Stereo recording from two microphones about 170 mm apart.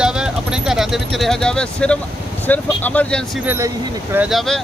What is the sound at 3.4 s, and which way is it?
Speech, 15° right (ahead or behind).